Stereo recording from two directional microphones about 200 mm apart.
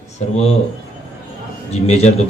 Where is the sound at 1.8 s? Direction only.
35° left (ahead or behind).